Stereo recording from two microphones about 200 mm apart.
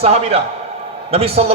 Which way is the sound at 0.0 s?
30° right (ahead or behind).